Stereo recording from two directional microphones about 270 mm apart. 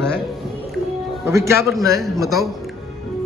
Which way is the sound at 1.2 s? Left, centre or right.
Centre.